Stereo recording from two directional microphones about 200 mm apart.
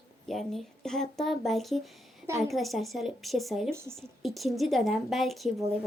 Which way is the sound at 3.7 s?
15° right (ahead or behind).